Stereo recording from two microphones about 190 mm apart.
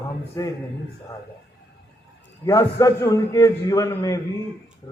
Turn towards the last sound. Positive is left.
turn(degrees=15)  # may be behind; listen again after turning